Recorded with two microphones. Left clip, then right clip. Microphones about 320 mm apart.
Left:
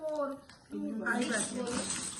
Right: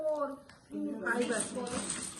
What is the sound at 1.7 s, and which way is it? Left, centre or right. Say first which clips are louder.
Speech: left 2 dB; centre.